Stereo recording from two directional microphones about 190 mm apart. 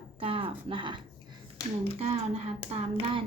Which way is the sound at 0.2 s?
30° right (ahead or behind).